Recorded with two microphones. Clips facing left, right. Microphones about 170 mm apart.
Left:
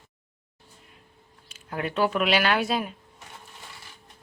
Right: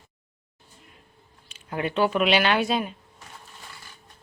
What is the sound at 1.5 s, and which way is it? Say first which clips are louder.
Speech: right 2 dB; centre (ahead or behind).